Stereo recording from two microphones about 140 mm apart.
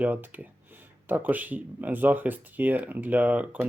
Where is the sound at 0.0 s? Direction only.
10° right (ahead or behind).